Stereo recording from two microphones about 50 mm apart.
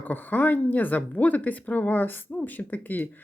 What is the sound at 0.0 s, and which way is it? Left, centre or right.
Speech, left.